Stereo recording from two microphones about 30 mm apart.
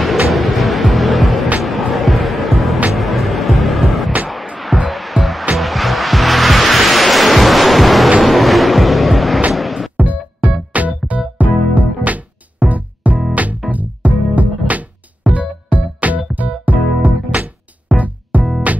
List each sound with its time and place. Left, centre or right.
0.0 s music: centre
10.0 s music: right